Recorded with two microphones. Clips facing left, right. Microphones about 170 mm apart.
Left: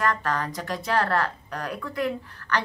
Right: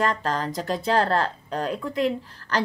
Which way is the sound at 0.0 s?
25° right (ahead or behind).